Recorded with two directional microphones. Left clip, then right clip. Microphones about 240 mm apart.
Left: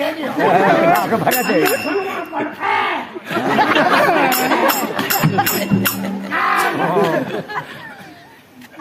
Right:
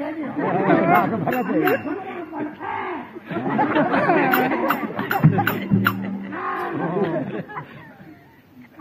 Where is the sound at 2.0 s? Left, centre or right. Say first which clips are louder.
Left 8 dB; left.